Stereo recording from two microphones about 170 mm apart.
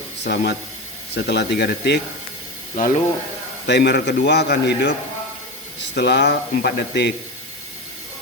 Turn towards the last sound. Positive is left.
turn(degrees=75)  # may be behind; listen again after turning